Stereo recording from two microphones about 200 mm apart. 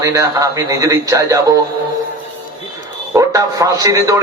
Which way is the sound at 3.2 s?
15° right (ahead or behind).